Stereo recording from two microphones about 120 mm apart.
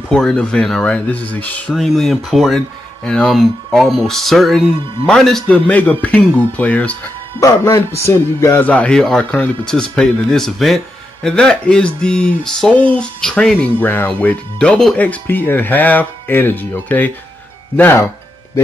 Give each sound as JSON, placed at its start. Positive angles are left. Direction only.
{"t": 0.1, "sound": "speech", "side_deg": 5}
{"t": 1.7, "sound": "speech", "side_deg": 0}
{"t": 7.3, "sound": "music", "side_deg": 30}
{"t": 8.6, "sound": "speech", "side_deg": 10}